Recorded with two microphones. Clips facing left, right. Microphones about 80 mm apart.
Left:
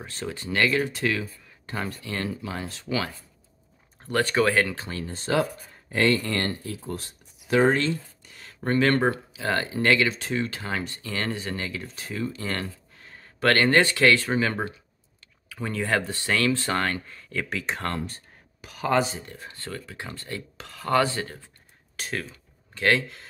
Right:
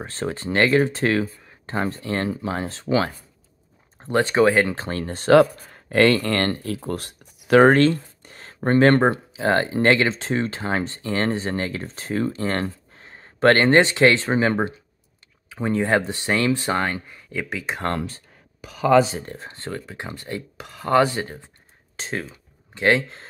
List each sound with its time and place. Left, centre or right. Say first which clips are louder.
0.0 s speech: right 6 dB; right
4.0 s speech: right 5 dB; right
4.7 s speech: right 6 dB; right; by 17.8 s centre
19.2 s speech: right 5 dB; right